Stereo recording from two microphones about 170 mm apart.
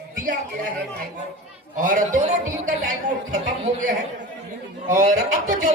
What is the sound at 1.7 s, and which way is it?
A man's voice, 50° right (ahead or behind).